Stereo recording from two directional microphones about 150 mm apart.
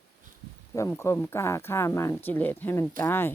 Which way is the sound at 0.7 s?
20° left (ahead or behind).